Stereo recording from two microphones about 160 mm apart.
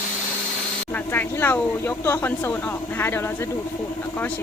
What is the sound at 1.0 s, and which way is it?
Speech, 10° left (ahead or behind).